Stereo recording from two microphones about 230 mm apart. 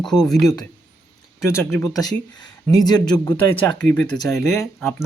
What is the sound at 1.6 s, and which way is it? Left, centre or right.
Speech, centre.